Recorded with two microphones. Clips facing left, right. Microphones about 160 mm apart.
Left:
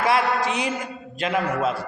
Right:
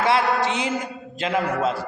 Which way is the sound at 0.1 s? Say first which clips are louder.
Even; 25° right (ahead or behind).